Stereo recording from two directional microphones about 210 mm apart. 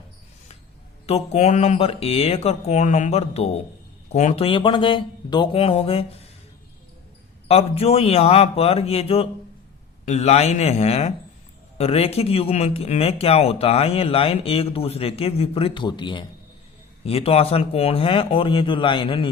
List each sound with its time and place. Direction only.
1.0 s speech: 30° left (ahead or behind)
7.4 s speech: 30° left (ahead or behind)